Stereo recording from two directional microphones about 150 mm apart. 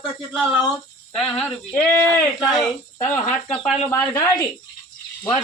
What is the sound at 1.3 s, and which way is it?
Speech, 5° left (ahead or behind).